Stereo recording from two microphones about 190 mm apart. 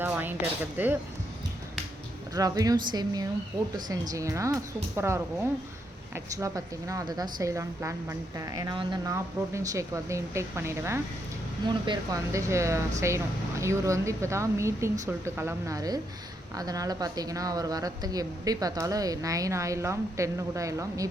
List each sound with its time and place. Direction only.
0.0 s speech: 10° right (ahead or behind)
2.3 s a woman's voice: 20° right (ahead or behind)